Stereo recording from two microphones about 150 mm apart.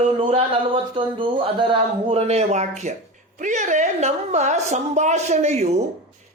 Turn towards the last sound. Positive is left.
turn(degrees=-45)  # may be behind; listen again after turning